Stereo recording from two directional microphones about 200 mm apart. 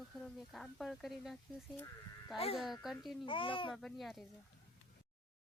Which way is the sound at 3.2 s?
25° left (ahead or behind).